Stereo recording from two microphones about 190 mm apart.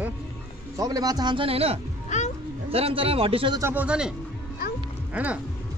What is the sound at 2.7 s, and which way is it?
Speech, 30° right (ahead or behind).